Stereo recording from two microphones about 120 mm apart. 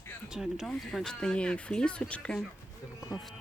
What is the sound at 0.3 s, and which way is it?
Speech, centre (ahead or behind).